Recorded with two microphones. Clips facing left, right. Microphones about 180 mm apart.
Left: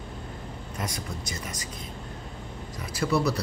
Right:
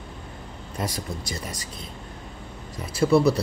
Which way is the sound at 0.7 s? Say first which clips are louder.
Right 5 dB; 30° right (ahead or behind).